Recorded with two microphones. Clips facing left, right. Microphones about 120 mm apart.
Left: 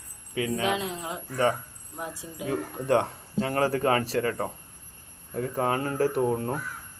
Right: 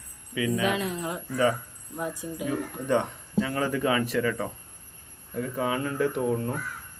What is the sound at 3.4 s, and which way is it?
Speech, 45° left (ahead or behind).